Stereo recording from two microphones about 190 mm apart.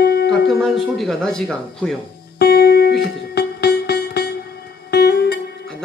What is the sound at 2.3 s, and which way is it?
Music, 55° left (ahead or behind).